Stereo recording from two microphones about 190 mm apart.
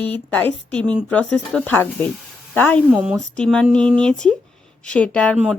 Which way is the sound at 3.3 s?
5° left (ahead or behind).